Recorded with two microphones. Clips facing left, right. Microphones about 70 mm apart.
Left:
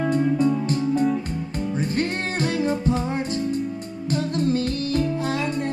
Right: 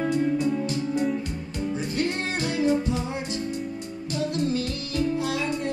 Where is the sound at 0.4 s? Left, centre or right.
Left.